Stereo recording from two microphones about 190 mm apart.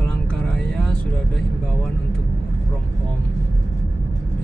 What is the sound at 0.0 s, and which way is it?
Vehicle, 5° left (ahead or behind).